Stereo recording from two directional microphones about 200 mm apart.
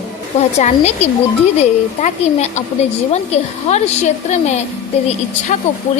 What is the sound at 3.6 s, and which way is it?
Speech, 35° left (ahead or behind).